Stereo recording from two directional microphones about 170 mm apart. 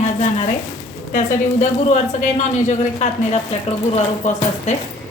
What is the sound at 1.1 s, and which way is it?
A woman's voice, 45° left (ahead or behind).